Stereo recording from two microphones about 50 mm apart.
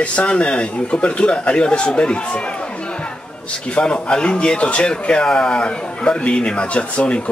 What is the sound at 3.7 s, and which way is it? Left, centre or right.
Speech, centre.